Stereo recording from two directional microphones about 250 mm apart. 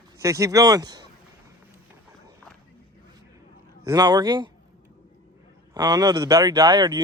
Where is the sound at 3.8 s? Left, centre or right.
Centre.